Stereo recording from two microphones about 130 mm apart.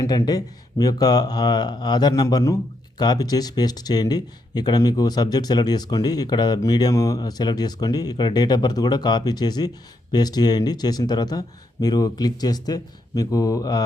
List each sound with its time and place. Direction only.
0.3 s speech: 30° left (ahead or behind)